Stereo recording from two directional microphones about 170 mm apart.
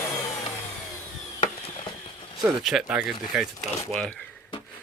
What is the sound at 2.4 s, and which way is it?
Speech, centre (ahead or behind).